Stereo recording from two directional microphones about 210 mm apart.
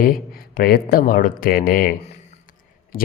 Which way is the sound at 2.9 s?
40° left (ahead or behind).